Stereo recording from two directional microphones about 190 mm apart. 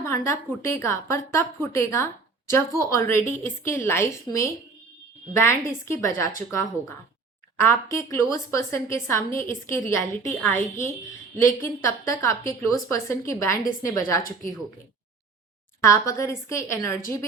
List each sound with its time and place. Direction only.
0.0 s a woman's voice: 15° left (ahead or behind)
15.8 s a woman's voice: 15° left (ahead or behind)